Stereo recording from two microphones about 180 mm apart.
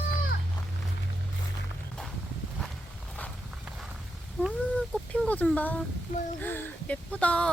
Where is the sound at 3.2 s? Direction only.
10° left (ahead or behind).